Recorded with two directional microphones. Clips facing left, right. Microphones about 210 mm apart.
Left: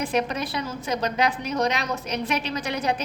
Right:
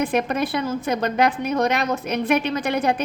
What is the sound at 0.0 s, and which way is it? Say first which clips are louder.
A woman's voice: right 4 dB; 55° right (ahead or behind).